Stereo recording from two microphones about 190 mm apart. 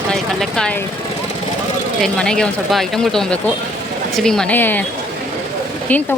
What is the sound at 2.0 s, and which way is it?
Speech, 5° left (ahead or behind).